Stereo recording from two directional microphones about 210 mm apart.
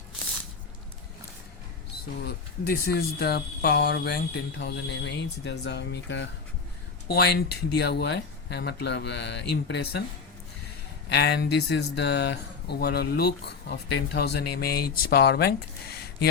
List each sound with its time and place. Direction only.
2.2 s speech: 50° left (ahead or behind)
11.1 s speech: 50° left (ahead or behind)